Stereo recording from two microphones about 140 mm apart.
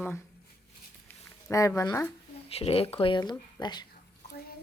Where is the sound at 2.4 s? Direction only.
45° left (ahead or behind).